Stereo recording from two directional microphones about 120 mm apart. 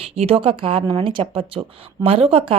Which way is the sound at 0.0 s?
55° right (ahead or behind).